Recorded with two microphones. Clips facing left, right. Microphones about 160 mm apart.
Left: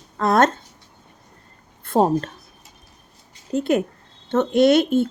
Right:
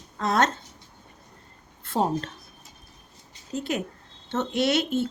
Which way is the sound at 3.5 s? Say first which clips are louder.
Left 9 dB; 55° left (ahead or behind).